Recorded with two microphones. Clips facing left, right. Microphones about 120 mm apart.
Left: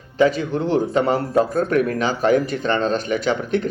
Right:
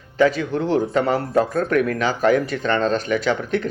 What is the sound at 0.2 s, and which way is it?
A man's voice, 30° left (ahead or behind).